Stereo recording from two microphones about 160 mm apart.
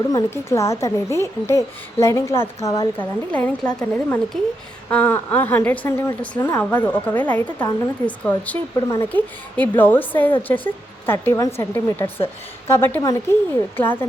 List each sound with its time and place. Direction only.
0.1 s a woman's voice: 20° left (ahead or behind)
3.3 s a woman's voice: 10° left (ahead or behind)